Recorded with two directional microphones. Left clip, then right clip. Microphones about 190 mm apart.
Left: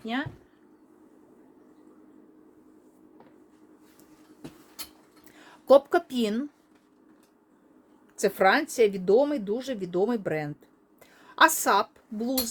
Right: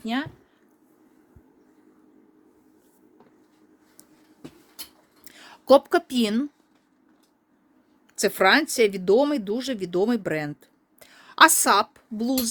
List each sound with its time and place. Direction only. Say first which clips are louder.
0.0 s speech: right 3 dB; 55° right (ahead or behind)
5.2 s speech: right 4 dB; 50° right (ahead or behind)
8.1 s speech: right 3 dB; 50° right (ahead or behind)